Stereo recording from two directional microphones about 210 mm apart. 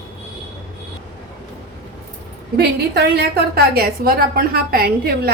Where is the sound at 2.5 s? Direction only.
50° right (ahead or behind).